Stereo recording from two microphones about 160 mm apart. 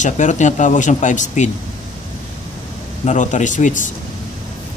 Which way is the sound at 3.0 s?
50° left (ahead or behind).